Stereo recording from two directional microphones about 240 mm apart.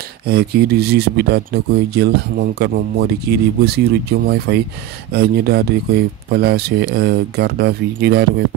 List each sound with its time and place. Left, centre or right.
0.3 s speech: right